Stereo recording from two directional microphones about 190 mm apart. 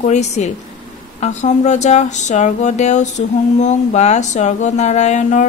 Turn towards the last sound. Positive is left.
turn(degrees=40)  # may be behind; listen again after turning